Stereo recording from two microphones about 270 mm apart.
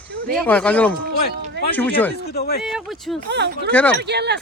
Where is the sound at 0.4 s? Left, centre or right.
Centre.